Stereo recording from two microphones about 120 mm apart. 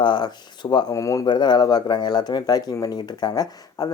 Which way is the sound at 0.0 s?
40° left (ahead or behind).